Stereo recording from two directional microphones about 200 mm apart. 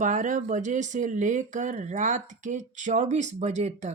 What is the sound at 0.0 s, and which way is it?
Speech, 40° right (ahead or behind).